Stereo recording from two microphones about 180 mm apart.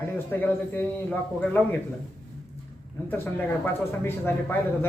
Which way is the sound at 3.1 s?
10° left (ahead or behind).